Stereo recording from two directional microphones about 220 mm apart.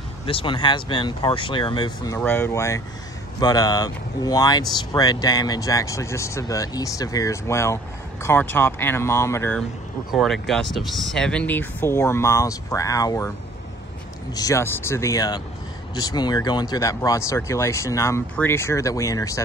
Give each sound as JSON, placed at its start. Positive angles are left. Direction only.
{"t": 0.3, "sound": "speech", "side_deg": 25}
{"t": 2.1, "sound": "speech", "side_deg": 10}
{"t": 14.3, "sound": "speech", "side_deg": 15}